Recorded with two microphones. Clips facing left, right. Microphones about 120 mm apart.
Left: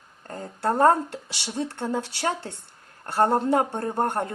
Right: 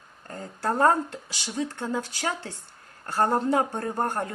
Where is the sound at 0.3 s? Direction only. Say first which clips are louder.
Left 3 dB; 60° left (ahead or behind).